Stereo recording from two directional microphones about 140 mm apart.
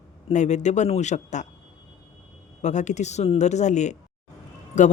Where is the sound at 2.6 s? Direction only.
60° left (ahead or behind).